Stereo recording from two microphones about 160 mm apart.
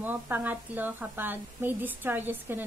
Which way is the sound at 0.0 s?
10° right (ahead or behind).